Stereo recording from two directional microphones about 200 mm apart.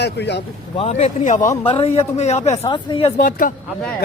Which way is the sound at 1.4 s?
15° left (ahead or behind).